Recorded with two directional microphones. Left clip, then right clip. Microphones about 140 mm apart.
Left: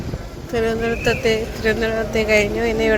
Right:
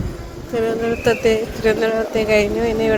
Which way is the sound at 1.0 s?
35° right (ahead or behind).